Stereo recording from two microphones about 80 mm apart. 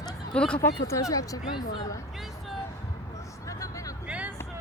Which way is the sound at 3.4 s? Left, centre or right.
Left.